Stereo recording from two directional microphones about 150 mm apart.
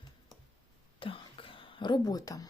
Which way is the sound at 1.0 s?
35° left (ahead or behind).